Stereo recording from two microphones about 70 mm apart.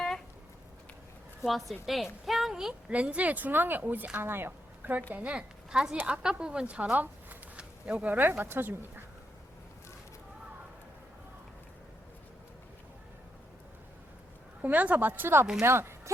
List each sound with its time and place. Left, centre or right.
1.4 s a woman's voice: centre
2.9 s speech: centre
5.1 s speech: centre
14.6 s speech: right